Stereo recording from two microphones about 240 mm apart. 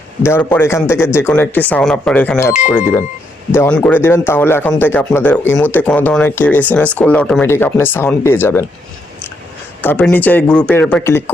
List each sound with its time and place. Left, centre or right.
0.2 s speech: centre
3.5 s speech: centre
9.8 s speech: centre